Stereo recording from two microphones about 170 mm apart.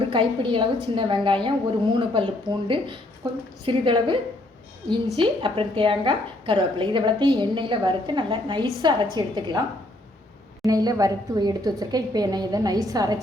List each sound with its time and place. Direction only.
0.1 s a woman's voice: 30° right (ahead or behind)
5.2 s a woman's voice: 30° right (ahead or behind)
10.6 s a woman's voice: 20° right (ahead or behind)